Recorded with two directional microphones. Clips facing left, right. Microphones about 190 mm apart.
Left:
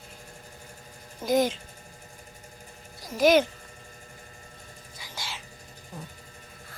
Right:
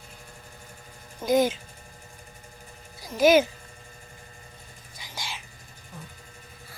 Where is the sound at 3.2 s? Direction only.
5° right (ahead or behind).